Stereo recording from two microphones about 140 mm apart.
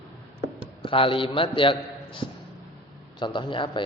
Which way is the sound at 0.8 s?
40° left (ahead or behind).